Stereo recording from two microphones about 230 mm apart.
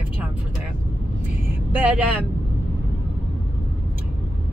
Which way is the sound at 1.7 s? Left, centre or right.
Centre.